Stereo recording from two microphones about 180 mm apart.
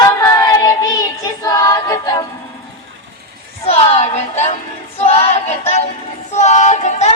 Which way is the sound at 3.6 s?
35° left (ahead or behind).